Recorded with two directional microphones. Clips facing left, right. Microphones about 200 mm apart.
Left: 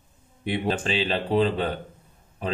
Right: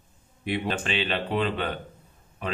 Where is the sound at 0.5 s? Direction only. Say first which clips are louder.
Left 2 dB; 30° left (ahead or behind).